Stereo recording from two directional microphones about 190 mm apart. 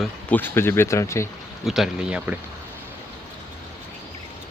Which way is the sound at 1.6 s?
Centre (ahead or behind).